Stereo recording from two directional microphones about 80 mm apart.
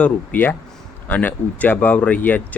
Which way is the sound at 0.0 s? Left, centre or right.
Left.